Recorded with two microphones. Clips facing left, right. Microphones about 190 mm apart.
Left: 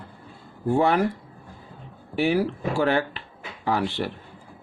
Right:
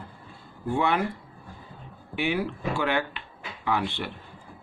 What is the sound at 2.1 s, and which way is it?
Speech, 40° left (ahead or behind).